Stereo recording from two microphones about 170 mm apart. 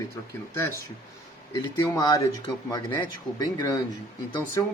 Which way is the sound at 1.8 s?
25° left (ahead or behind).